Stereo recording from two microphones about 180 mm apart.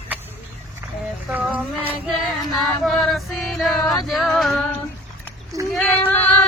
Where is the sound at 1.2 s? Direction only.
5° right (ahead or behind).